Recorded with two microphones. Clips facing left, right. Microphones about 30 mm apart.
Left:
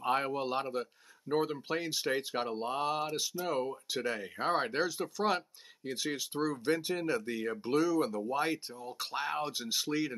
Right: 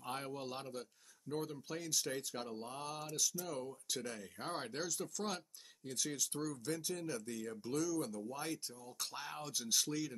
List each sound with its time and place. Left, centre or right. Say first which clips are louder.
0.0 s speech: left 12 dB; left